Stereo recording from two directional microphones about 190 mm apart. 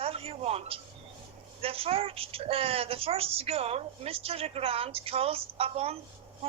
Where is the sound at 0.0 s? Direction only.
30° right (ahead or behind).